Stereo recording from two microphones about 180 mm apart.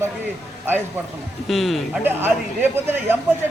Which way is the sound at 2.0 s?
10° right (ahead or behind).